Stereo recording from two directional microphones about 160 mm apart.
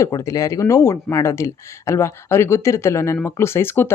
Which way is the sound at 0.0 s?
20° left (ahead or behind).